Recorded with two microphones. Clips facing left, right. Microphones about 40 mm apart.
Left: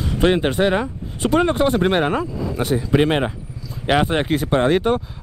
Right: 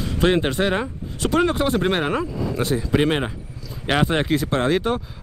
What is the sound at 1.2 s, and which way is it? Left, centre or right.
Speech, centre.